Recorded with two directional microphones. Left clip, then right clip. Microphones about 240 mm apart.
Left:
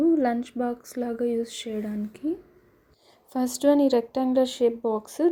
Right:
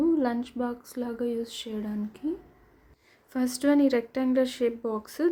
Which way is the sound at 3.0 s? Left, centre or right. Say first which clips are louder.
Left 2 dB; centre.